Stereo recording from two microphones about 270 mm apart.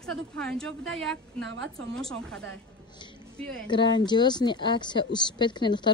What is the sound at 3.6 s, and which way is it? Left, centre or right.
A woman's voice, centre.